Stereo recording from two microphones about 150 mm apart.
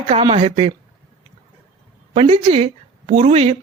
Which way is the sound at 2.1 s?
40° right (ahead or behind).